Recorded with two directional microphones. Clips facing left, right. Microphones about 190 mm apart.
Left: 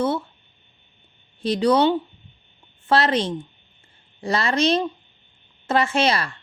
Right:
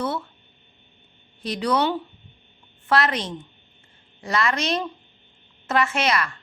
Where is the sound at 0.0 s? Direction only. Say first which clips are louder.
Left 4 dB; 25° left (ahead or behind).